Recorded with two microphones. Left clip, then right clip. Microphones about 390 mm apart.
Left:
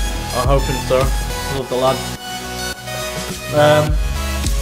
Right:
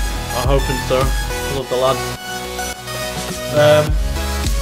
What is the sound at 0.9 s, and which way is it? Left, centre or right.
Speech, centre.